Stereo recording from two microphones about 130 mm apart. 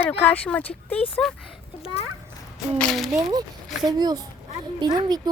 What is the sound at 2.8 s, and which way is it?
Speech, 5° left (ahead or behind).